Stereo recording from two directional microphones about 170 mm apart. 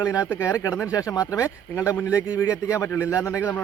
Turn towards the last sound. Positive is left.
turn(degrees=15)  # may be behind; listen again after turning